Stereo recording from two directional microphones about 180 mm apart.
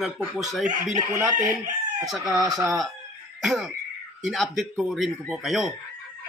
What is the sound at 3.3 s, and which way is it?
Music, centre (ahead or behind).